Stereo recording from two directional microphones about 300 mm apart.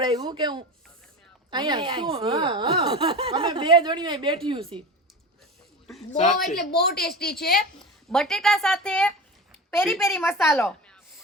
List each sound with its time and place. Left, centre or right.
0.0 s speech: centre
6.1 s a woman's voice: left
8.1 s a woman's voice: centre